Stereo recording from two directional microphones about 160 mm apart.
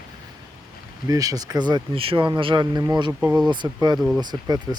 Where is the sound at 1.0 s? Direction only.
20° right (ahead or behind).